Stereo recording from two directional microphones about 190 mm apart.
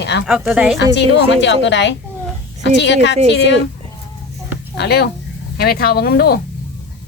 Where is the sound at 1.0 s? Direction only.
65° left (ahead or behind).